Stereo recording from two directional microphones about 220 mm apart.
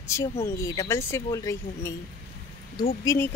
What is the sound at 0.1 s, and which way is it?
Speech, 15° left (ahead or behind).